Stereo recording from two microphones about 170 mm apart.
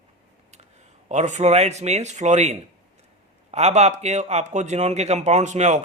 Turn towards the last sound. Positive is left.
turn(degrees=-45)  # may be behind; listen again after turning